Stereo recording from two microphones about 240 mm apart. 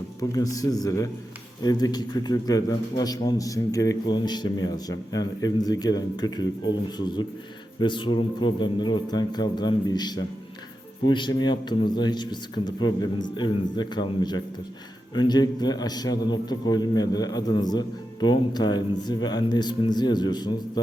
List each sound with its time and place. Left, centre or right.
0.2 s a man's voice: centre